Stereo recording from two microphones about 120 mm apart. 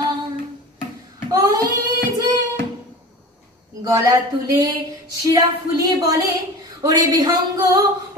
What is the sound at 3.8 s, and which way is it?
A woman's voice, 30° right (ahead or behind).